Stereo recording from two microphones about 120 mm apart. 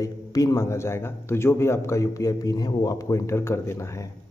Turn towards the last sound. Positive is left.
turn(degrees=20)  # may be behind; listen again after turning